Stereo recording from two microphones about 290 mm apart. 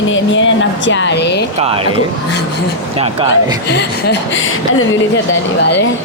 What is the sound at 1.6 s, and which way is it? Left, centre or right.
Speech, centre.